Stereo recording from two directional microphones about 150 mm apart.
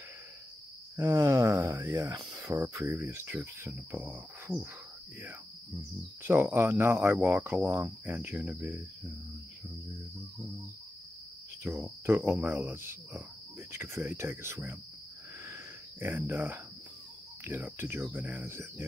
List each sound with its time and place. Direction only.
0.9 s speech: 20° right (ahead or behind)
6.2 s speech: 15° right (ahead or behind)
11.7 s speech: 15° right (ahead or behind)
15.4 s a sound: 15° right (ahead or behind)
17.5 s speech: 10° right (ahead or behind)